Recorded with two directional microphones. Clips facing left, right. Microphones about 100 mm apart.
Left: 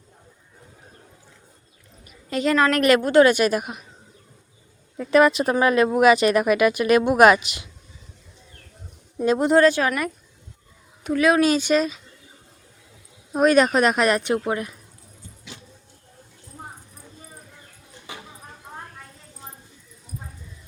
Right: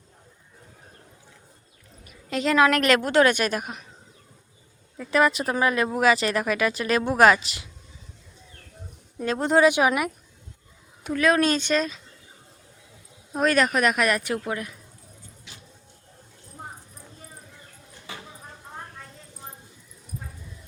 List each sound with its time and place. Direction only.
2.0 s a woman's voice: centre (ahead or behind)
4.9 s speech: 20° left (ahead or behind)
9.1 s speech: 15° left (ahead or behind)
9.6 s speech: 15° right (ahead or behind)
11.0 s speech: 5° left (ahead or behind)
13.3 s speech: 20° left (ahead or behind)
18.1 s a sound: 20° left (ahead or behind)